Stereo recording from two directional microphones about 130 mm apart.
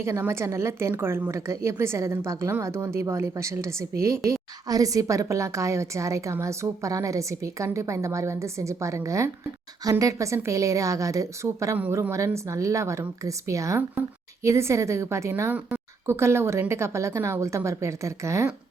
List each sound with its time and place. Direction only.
0.0 s a woman's voice: 20° right (ahead or behind)